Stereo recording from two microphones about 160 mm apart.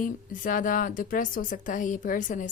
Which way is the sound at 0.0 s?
60° left (ahead or behind).